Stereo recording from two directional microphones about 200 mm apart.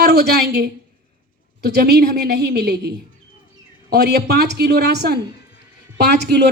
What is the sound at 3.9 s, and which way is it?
Speech, 55° right (ahead or behind).